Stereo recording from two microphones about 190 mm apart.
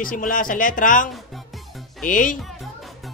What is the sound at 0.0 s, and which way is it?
Speech, 45° left (ahead or behind).